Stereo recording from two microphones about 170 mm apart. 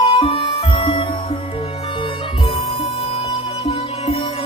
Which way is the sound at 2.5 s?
35° left (ahead or behind).